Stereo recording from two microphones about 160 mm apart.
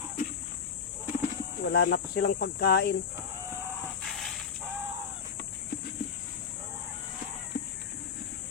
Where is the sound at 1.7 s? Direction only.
90° left.